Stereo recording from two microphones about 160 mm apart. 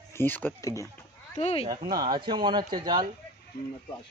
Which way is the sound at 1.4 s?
45° left (ahead or behind).